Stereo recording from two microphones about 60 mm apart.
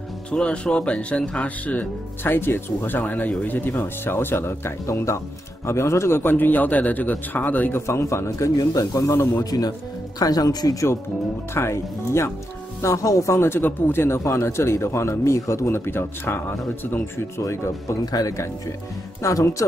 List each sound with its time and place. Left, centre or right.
0.3 s speech: centre
2.2 s speech: left
7.7 s speech: left
9.4 s speech: left
11.5 s speech: left
12.8 s speech: left
13.4 s speech: left
15.7 s speech: left
17.5 s speech: left